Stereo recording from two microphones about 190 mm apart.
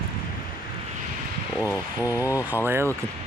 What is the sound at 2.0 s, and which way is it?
Speech, 15° left (ahead or behind).